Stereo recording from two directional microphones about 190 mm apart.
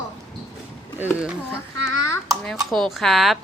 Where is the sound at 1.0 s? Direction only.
5° right (ahead or behind).